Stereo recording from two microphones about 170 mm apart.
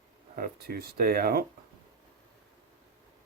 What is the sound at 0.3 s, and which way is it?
Speech, 60° right (ahead or behind).